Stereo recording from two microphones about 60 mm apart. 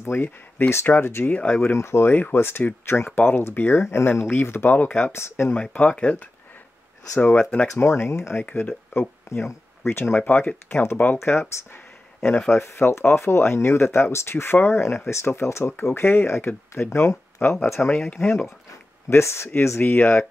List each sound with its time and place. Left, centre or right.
0.1 s speech: left
1.3 s speech: centre
1.6 s speech: left
2.0 s speech: left
5.1 s speech: left
5.5 s speech: centre
7.3 s speech: centre
7.7 s speech: left
8.4 s speech: left
9.3 s speech: left
10.1 s speech: left
18.2 s speech: left
19.8 s speech: left